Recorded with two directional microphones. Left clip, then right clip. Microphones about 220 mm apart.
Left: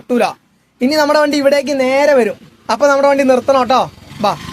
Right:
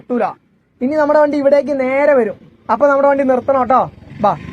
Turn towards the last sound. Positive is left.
turn(degrees=30)  # may be behind; listen again after turning